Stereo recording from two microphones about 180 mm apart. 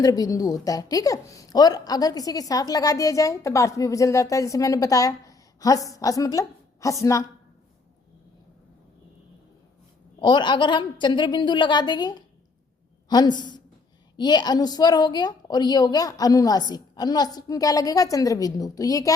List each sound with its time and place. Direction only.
0.0 s a woman's voice: 20° left (ahead or behind)
10.2 s a woman's voice: 25° left (ahead or behind)